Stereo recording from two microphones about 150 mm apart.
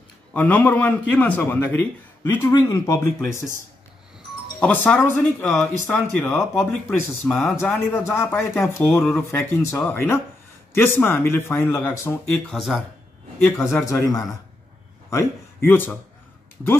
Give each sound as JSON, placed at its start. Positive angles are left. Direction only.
{"t": 0.3, "sound": "a man's voice", "side_deg": 10}
{"t": 4.6, "sound": "a man's voice", "side_deg": 10}
{"t": 5.9, "sound": "a man's voice", "side_deg": 15}
{"t": 7.5, "sound": "a man's voice", "side_deg": 15}
{"t": 13.6, "sound": "speech", "side_deg": 20}